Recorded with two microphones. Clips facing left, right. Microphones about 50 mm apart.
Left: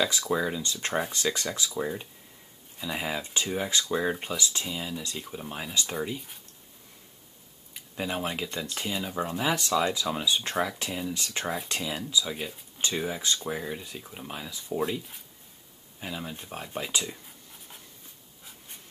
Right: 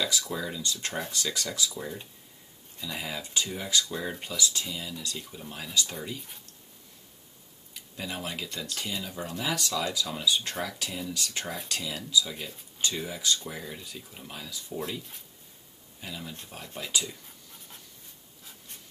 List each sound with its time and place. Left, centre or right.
0.0 s speech: left
7.7 s speech: left
14.8 s speech: centre
16.0 s speech: left